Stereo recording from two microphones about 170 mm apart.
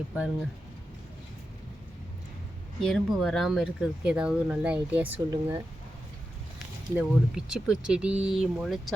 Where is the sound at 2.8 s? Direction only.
Centre (ahead or behind); by 5.6 s 15° right (ahead or behind).